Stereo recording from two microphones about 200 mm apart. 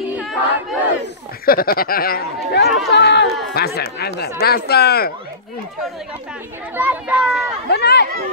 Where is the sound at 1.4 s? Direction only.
50° left (ahead or behind).